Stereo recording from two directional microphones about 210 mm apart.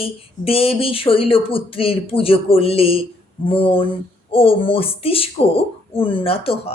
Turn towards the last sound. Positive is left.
turn(degrees=25)  # may be behind; listen again after turning